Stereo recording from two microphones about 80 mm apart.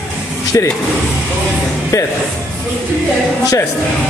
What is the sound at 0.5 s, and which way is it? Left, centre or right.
Speech, left.